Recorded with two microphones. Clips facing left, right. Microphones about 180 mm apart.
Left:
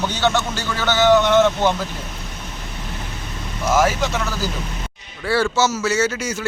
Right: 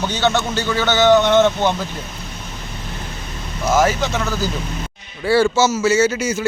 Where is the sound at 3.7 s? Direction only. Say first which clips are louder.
Right 1 dB; 10° left (ahead or behind).